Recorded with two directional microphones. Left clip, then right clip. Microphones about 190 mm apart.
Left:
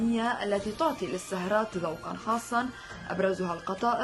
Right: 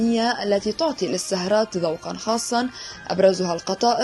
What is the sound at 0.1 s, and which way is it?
A woman's voice, 30° right (ahead or behind).